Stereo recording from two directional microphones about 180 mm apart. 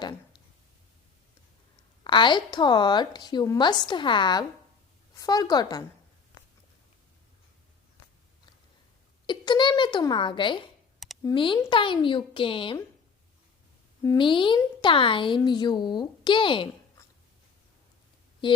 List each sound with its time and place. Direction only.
2.0 s a woman's voice: 25° left (ahead or behind)
9.2 s a woman's voice: 25° left (ahead or behind)
14.0 s a woman's voice: 20° left (ahead or behind)